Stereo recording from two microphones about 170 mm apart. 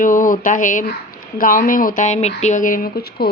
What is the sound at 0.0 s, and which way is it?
Speech, 50° left (ahead or behind).